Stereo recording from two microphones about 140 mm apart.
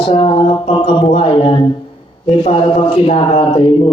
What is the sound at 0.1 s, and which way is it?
Speech, 40° left (ahead or behind).